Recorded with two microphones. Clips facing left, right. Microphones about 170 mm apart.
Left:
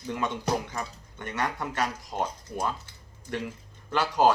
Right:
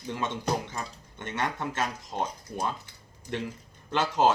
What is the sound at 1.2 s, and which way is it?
Speech, 25° right (ahead or behind).